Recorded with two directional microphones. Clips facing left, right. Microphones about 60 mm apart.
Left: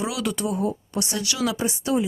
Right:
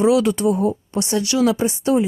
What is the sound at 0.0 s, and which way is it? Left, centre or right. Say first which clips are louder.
A woman's voice: right 11 dB; right.